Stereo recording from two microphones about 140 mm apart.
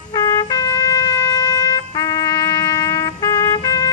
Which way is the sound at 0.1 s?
25° left (ahead or behind).